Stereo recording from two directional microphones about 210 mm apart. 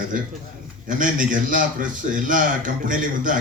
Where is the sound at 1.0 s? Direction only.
40° right (ahead or behind).